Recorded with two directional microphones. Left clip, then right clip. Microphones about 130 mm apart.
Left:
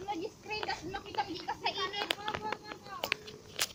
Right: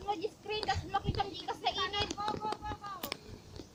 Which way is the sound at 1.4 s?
15° right (ahead or behind).